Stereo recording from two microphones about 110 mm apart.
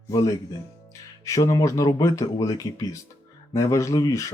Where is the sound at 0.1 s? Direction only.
30° left (ahead or behind).